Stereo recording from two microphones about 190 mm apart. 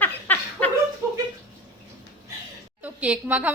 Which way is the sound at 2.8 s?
5° right (ahead or behind).